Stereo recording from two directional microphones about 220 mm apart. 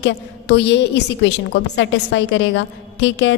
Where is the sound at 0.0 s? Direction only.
50° left (ahead or behind).